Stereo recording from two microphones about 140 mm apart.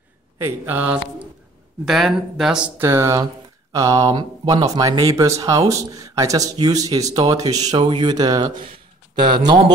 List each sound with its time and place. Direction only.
0.4 s speech: 15° right (ahead or behind)
1.9 s speech: centre (ahead or behind)
2.8 s speech: 20° right (ahead or behind)